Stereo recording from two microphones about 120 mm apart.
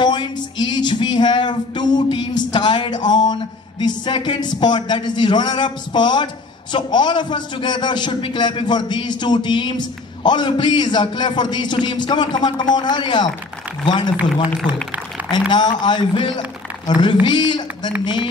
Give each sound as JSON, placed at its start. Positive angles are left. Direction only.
{"t": 0.0, "sound": "a sound", "side_deg": 40}
{"t": 3.8, "sound": "a man's voice", "side_deg": 40}
{"t": 15.3, "sound": "a man's voice", "side_deg": 35}